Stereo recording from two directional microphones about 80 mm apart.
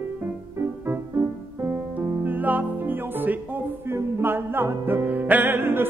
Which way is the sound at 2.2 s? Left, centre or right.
Right.